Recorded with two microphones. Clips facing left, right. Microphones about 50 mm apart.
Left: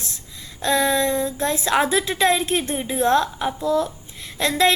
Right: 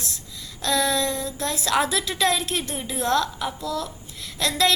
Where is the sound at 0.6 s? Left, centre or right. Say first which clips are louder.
Left 4 dB; left.